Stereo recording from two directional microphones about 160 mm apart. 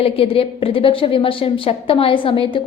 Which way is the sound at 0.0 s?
35° left (ahead or behind).